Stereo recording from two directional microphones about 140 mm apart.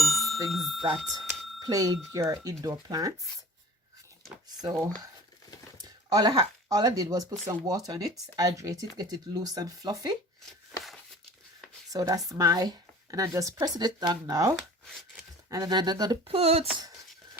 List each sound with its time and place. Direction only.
0.0 s bicycle bell: centre (ahead or behind)
0.5 s speech: centre (ahead or behind)
1.1 s speech: 30° right (ahead or behind)
4.6 s speech: 25° right (ahead or behind)
11.9 s speech: 25° right (ahead or behind)
16.3 s speech: 50° right (ahead or behind)